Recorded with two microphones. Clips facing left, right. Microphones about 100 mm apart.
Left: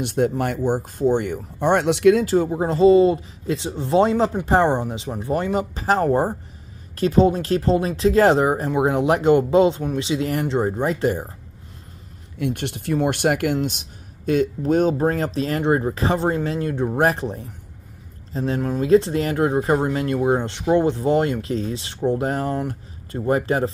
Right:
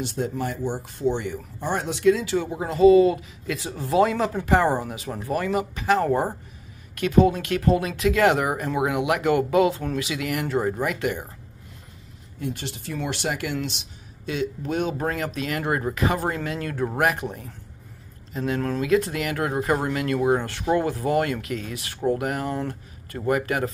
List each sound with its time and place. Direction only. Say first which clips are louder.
0.0 s speech: left 6 dB; 60° left (ahead or behind)
2.2 s speech: left 6 dB; 40° left (ahead or behind)
12.4 s speech: left 6 dB; 65° left (ahead or behind); by 17.0 s 20° left (ahead or behind)
17.0 s speech: left 3 dB; 35° left (ahead or behind)
22.6 s speech: left 3 dB; 20° left (ahead or behind)